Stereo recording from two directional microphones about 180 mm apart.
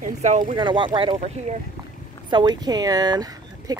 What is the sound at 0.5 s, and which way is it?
Speech, 25° right (ahead or behind).